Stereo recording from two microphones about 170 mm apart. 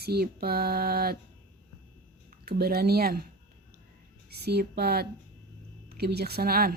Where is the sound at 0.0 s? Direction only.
65° right (ahead or behind).